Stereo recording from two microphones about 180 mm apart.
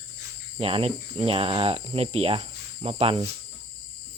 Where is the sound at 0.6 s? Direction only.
30° right (ahead or behind).